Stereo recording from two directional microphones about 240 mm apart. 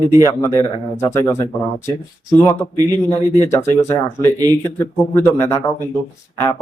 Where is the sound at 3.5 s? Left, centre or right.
Centre.